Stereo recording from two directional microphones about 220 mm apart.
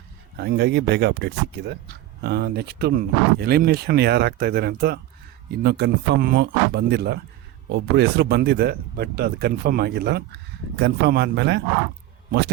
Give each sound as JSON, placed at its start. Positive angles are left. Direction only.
{"t": 0.3, "sound": "speech", "side_deg": -50}